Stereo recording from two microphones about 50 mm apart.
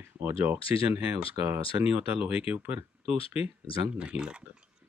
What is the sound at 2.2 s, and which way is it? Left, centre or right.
Speech, right.